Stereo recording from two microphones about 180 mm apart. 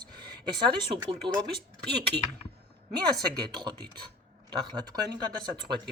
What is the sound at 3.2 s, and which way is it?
Speech, 25° right (ahead or behind).